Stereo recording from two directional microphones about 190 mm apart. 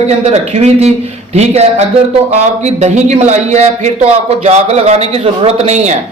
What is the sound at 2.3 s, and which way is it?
Speech, 35° right (ahead or behind).